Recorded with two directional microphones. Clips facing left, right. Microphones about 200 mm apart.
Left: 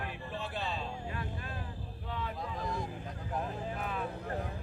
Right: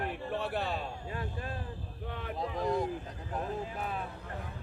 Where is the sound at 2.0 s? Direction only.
60° right (ahead or behind).